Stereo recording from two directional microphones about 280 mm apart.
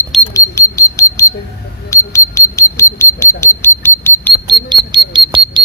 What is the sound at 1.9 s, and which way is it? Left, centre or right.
Squawk, centre.